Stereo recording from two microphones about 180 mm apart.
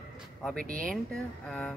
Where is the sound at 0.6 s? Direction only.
50° right (ahead or behind).